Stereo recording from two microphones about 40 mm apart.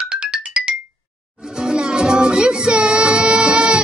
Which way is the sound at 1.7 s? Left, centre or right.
Centre.